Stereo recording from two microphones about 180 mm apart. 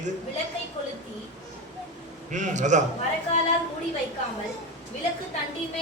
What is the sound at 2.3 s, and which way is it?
Speech, 40° right (ahead or behind).